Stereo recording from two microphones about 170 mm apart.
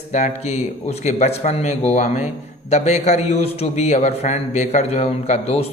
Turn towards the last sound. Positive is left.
turn(degrees=35)  # may be behind; listen again after turning